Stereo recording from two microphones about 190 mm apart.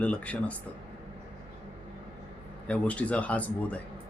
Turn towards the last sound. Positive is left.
turn(degrees=5)  # may be behind; listen again after turning